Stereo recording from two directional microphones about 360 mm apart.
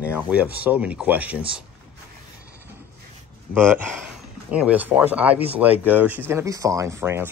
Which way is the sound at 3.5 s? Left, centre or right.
Centre.